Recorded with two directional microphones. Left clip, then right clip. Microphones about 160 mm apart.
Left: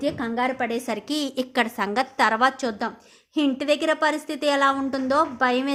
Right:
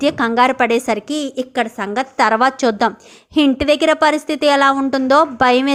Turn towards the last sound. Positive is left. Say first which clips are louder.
# right 8 dB
turn(degrees=-35)  # may be behind; listen again after turning